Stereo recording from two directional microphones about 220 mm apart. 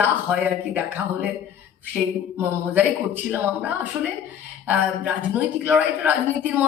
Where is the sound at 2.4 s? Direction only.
10° right (ahead or behind).